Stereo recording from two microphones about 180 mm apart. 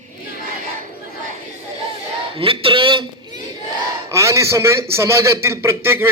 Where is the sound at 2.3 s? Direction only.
30° right (ahead or behind).